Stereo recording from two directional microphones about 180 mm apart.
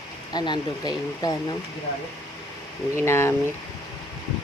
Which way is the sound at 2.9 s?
15° left (ahead or behind).